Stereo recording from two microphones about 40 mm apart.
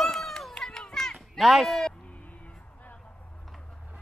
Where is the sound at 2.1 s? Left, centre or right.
Left.